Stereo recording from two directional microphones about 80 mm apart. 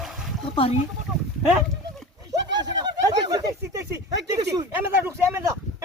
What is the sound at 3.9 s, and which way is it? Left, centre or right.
Speech, right.